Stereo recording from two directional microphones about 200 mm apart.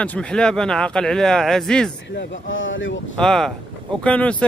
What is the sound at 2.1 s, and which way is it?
Speech, 70° left (ahead or behind).